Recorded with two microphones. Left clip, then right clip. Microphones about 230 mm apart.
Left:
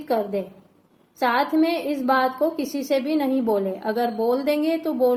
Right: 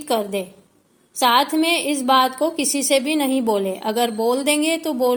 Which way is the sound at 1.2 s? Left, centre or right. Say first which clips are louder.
Right 4 dB; right.